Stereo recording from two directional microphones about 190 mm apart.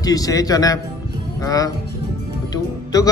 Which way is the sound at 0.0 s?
20° left (ahead or behind).